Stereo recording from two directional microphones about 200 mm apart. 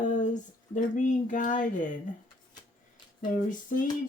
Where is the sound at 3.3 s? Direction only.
40° left (ahead or behind).